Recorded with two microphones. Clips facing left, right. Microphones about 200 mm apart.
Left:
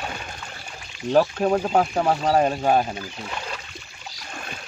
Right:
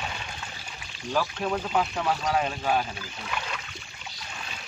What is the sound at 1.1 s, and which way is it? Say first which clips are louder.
Speech: left 9 dB; 45° left (ahead or behind).